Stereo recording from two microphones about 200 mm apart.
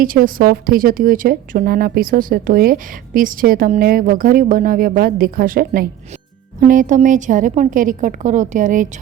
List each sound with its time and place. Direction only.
0.0 s a woman's voice: 45° right (ahead or behind)